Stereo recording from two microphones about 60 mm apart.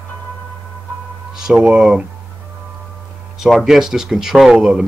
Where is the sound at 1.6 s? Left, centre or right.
Centre.